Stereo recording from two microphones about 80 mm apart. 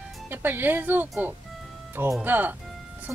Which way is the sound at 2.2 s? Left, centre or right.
Right.